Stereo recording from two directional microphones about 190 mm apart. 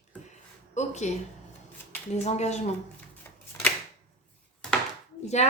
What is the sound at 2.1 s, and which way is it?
Speech, 35° left (ahead or behind).